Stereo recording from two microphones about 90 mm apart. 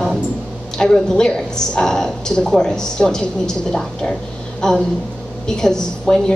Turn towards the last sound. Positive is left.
turn(degrees=10)  # may be behind; listen again after turning